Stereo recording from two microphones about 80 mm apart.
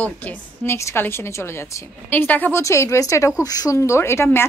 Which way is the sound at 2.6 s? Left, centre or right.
Left.